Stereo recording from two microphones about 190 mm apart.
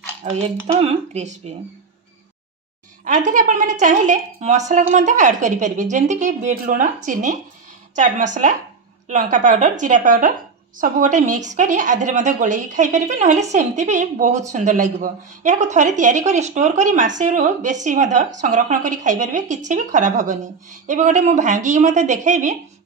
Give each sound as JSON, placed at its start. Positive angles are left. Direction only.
{"t": 0.2, "sound": "speech", "side_deg": -35}
{"t": 3.1, "sound": "speech", "side_deg": -40}